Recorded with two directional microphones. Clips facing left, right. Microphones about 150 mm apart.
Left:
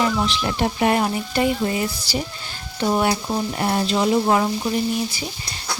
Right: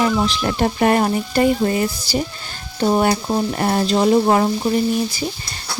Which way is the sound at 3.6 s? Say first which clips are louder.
Right 3 dB; 40° right (ahead or behind).